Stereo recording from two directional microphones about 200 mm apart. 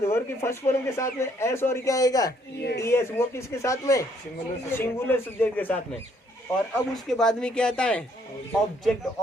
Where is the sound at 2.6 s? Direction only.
55° left (ahead or behind).